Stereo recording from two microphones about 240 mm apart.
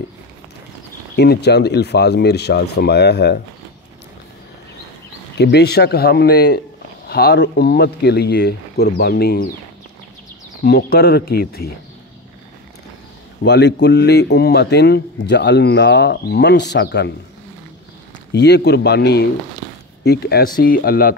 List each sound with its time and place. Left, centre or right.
1.1 s speech: left
5.4 s speech: left
10.6 s speech: left
13.4 s speech: left
18.3 s speech: left